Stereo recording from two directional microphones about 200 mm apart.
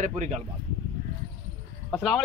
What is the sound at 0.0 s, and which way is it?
Speech, 35° right (ahead or behind).